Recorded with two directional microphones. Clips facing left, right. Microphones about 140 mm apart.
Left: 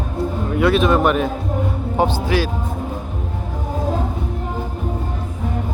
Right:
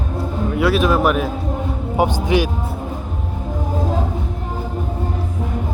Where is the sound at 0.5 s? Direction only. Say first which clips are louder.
Left 1 dB; 5° right (ahead or behind).